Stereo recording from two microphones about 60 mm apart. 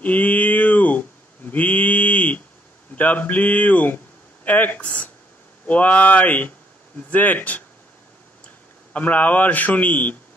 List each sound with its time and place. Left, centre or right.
0.0 s a sound: left
3.0 s speech: left
8.9 s speech: left